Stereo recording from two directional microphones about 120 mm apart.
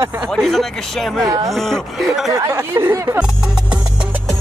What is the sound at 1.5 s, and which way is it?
Speech, centre (ahead or behind).